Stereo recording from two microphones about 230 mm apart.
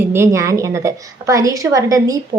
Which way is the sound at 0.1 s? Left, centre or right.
Centre.